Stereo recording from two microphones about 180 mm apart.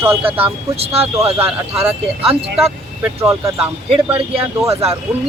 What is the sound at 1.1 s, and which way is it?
Speech, 15° right (ahead or behind).